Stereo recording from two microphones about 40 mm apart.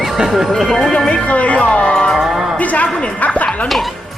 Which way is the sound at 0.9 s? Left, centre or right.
Left.